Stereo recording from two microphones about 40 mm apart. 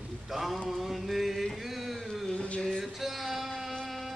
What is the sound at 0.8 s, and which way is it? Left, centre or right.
Mantra, centre.